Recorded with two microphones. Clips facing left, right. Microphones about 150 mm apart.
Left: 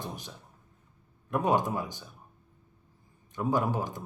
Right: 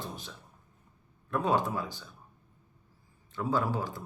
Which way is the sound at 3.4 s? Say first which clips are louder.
Left 2 dB; 20° left (ahead or behind).